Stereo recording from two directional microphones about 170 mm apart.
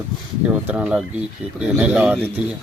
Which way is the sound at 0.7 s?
5° right (ahead or behind).